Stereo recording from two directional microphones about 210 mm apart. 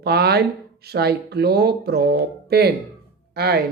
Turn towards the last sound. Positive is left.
turn(degrees=-45)  # may be behind; listen again after turning